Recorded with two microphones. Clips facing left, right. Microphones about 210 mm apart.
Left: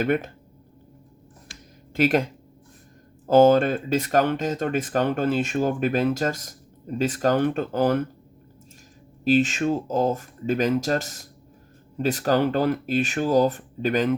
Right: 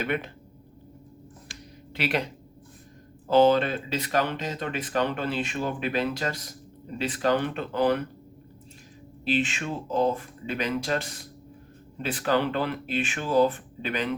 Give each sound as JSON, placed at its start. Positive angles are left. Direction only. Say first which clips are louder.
{"t": 0.0, "sound": "speech", "louder": "left 6 dB", "side_deg": 45}
{"t": 1.9, "sound": "speech", "louder": "left 7 dB", "side_deg": 45}
{"t": 3.2, "sound": "speech", "louder": "left 4 dB", "side_deg": 45}
{"t": 9.2, "sound": "speech", "louder": "left 7 dB", "side_deg": 40}